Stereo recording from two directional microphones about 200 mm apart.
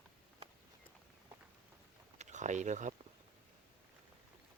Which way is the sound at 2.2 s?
35° right (ahead or behind).